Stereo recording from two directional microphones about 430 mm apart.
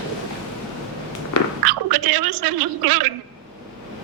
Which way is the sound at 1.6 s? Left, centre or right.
Right.